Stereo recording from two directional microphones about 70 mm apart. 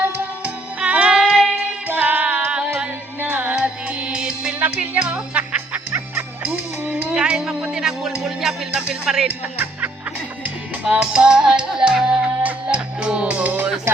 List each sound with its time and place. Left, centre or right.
0.4 s music: centre
1.9 s music: right
4.6 s music: right
7.1 s speech: centre
10.4 s music: centre